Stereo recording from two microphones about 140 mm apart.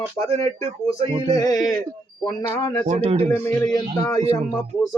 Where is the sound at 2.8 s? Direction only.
50° right (ahead or behind).